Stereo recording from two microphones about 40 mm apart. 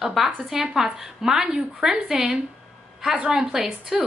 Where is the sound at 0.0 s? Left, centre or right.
Centre.